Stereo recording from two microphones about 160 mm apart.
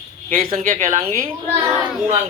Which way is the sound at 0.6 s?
50° right (ahead or behind).